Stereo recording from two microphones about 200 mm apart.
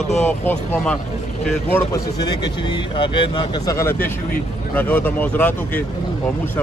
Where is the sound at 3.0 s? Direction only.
20° left (ahead or behind).